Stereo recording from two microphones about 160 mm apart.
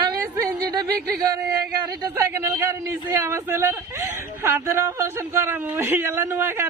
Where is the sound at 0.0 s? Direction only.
20° right (ahead or behind).